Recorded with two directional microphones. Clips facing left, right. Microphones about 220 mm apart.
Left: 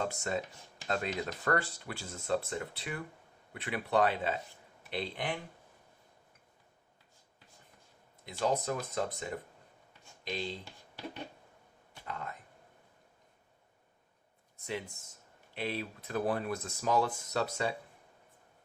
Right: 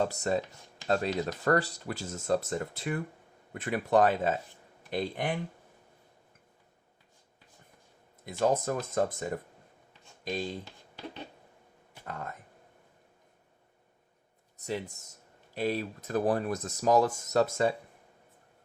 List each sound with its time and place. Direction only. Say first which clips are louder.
0.0 s speech: right 6 dB; 40° right (ahead or behind)
8.2 s speech: right 4 dB; 45° right (ahead or behind)
12.0 s speech: right 2 dB; 45° right (ahead or behind)
14.6 s speech: right 4 dB; 40° right (ahead or behind)